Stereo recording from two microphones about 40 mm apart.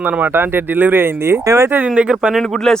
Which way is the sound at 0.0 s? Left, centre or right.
Right.